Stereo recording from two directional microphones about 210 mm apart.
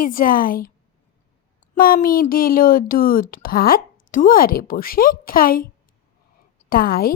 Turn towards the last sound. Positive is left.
turn(degrees=45)  # may be behind; listen again after turning